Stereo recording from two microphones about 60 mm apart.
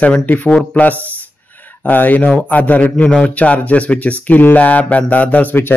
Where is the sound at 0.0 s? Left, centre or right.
Left.